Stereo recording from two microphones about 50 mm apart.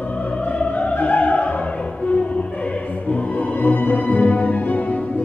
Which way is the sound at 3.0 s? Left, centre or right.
Left.